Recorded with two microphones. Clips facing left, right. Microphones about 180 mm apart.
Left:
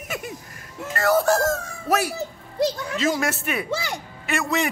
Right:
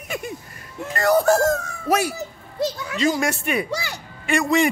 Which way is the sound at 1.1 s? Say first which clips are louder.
Right 3 dB; 20° right (ahead or behind).